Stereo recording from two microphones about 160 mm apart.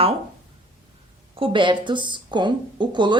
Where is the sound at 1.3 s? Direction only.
30° right (ahead or behind).